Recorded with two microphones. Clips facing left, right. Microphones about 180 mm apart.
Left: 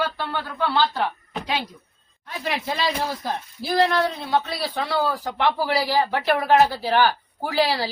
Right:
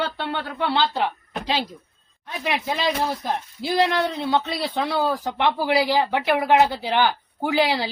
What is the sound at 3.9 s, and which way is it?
A man's voice, 20° right (ahead or behind).